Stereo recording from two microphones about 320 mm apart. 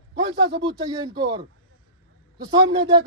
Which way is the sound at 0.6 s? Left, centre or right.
Centre.